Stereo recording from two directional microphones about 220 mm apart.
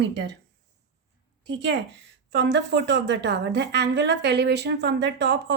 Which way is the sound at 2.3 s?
50° right (ahead or behind).